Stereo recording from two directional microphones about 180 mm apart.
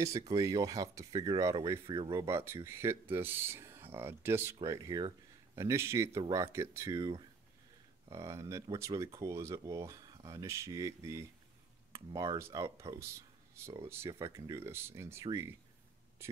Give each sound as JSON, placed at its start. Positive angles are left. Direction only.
{"t": 0.0, "sound": "speech", "side_deg": -15}